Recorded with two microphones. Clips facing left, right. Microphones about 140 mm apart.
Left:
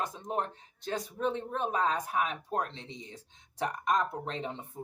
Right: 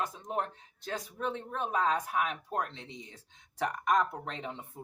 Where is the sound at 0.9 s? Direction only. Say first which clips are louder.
Left 3 dB; 30° left (ahead or behind).